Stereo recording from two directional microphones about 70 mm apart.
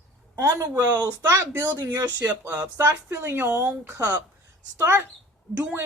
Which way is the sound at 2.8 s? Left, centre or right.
Right.